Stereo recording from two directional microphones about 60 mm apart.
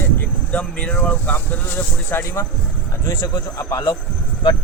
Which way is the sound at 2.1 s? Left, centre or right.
Left.